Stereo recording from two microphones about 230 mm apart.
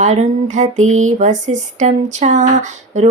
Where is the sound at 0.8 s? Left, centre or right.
Right.